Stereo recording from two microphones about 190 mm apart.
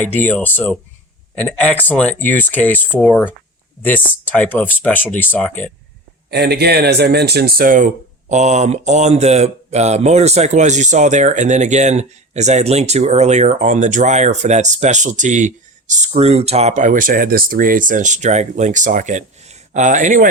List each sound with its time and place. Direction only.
0.0 s speech: 10° left (ahead or behind)
6.3 s speech: 60° right (ahead or behind); by 20.2 s 40° right (ahead or behind)